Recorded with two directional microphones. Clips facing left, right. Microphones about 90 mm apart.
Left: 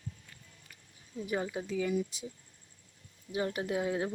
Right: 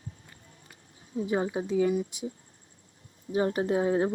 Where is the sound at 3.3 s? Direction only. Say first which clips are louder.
Right 7 dB; 35° right (ahead or behind).